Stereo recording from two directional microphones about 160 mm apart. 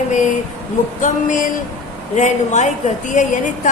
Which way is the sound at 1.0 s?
55° left (ahead or behind).